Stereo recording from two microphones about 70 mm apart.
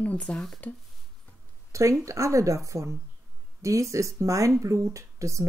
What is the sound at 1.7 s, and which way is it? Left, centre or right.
Speech, right.